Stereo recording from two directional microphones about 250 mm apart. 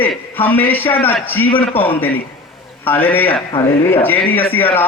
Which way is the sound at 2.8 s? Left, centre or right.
Centre.